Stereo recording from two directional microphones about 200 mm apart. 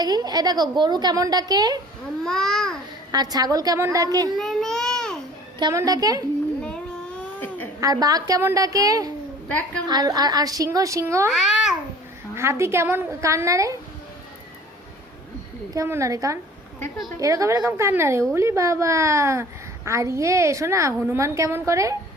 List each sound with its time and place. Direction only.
0.0 s a woman's voice: 20° right (ahead or behind)
2.2 s a child's voice: centre (ahead or behind)
3.1 s a woman's voice: 20° right (ahead or behind)
4.4 s speech: centre (ahead or behind)
5.5 s a woman's voice: 20° right (ahead or behind)
7.3 s a sound: 10° left (ahead or behind)
7.8 s a woman's voice: 20° right (ahead or behind)
9.5 s a woman's voice: 5° left (ahead or behind)
9.9 s a woman's voice: 20° right (ahead or behind)
11.3 s a child's voice: 5° right (ahead or behind)
15.7 s a woman's voice: 15° right (ahead or behind)